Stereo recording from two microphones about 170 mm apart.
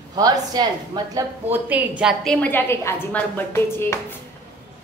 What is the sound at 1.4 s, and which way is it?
A woman's voice, 10° right (ahead or behind).